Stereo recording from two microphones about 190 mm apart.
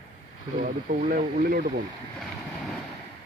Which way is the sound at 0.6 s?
50° right (ahead or behind).